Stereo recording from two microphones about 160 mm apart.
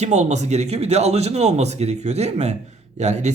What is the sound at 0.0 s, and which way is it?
A man's voice, 45° right (ahead or behind).